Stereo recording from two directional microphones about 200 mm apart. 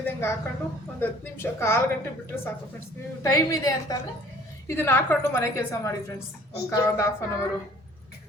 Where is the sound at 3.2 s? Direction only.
15° left (ahead or behind).